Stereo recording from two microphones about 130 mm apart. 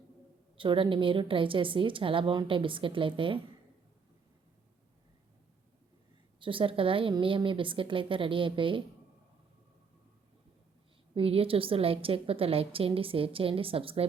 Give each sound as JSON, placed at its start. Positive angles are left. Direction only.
{"t": 0.5, "sound": "a woman's voice", "side_deg": -40}
{"t": 6.4, "sound": "a woman's voice", "side_deg": -40}
{"t": 11.1, "sound": "a woman's voice", "side_deg": -45}